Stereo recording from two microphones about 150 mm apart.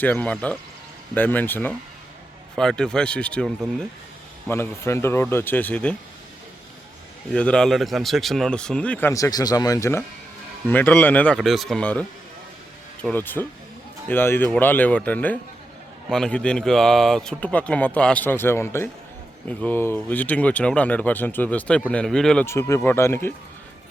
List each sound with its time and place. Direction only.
0.0 s speech: 10° left (ahead or behind)
4.4 s speech: 15° left (ahead or behind)
7.3 s speech: 5° left (ahead or behind)
10.7 s speech: 10° left (ahead or behind)
22.4 s speech: 15° left (ahead or behind)